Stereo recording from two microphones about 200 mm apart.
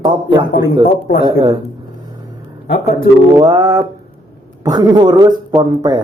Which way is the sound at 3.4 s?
20° right (ahead or behind).